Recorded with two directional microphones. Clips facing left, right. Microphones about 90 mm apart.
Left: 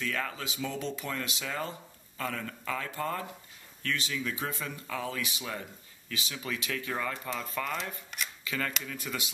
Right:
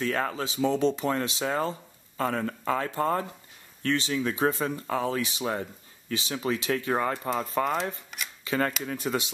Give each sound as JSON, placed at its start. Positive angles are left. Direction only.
{"t": 0.0, "sound": "speech", "side_deg": -40}
{"t": 8.1, "sound": "shuffling cards", "side_deg": 0}
{"t": 8.5, "sound": "speech", "side_deg": -35}